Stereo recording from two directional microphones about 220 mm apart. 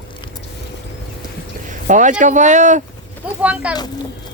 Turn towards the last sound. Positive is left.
turn(degrees=-5)  # may be behind; listen again after turning